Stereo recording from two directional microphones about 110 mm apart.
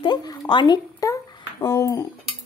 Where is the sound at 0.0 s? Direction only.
45° left (ahead or behind).